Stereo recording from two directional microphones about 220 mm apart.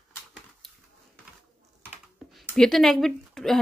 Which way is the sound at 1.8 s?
5° right (ahead or behind).